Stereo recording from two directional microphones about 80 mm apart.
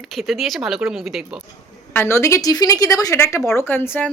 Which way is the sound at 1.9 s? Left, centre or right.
Left.